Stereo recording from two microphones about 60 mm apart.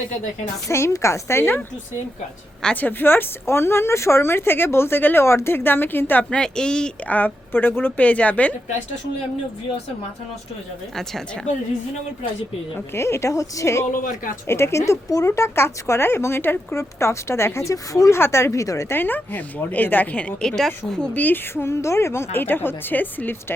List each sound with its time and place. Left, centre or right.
0.7 s speech: left
2.8 s speech: left
5.2 s speech: left
6.3 s speech: centre
7.1 s a woman's voice: left
12.9 s speech: left
14.4 s speech: left
18.2 s speech: left
18.9 s speech: left
20.6 s speech: centre
21.1 s a woman's voice: left
21.5 s speech: left